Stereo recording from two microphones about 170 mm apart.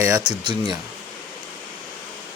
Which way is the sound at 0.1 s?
25° right (ahead or behind).